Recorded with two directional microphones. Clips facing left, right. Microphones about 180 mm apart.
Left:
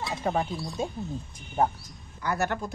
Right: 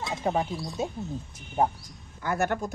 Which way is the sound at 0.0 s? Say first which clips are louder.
Right 1 dB; 15° right (ahead or behind).